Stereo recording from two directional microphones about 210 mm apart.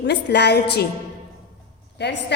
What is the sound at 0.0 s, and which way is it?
Speech, 55° left (ahead or behind).